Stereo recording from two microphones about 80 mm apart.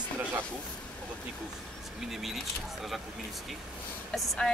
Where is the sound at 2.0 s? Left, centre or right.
Centre.